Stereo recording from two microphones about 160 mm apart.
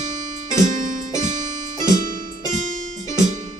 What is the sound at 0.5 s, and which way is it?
Music, 50° right (ahead or behind).